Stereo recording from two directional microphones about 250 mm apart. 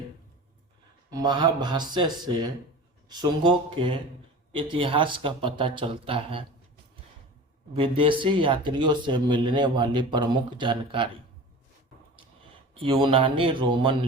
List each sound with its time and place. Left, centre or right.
1.1 s speech: centre
7.7 s speech: right
12.7 s speech: centre